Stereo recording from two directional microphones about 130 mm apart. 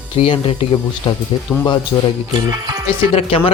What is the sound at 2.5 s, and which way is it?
Music, 25° right (ahead or behind).